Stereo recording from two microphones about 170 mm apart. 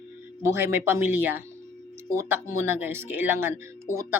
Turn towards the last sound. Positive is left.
turn(degrees=-15)  # may be behind; listen again after turning